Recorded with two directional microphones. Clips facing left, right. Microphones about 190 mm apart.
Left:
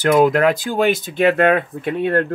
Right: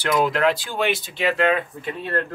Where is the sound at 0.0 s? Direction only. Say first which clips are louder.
Left 6 dB; 50° left (ahead or behind).